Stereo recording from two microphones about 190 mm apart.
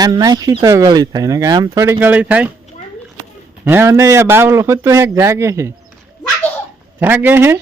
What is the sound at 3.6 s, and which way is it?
A man's voice, 15° right (ahead or behind).